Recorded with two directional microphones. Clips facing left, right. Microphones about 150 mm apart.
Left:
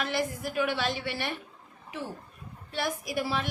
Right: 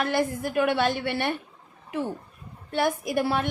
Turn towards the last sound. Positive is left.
turn(degrees=-55)  # may be behind; listen again after turning